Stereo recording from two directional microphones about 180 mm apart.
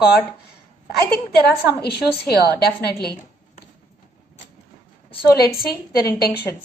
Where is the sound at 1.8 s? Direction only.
60° left (ahead or behind).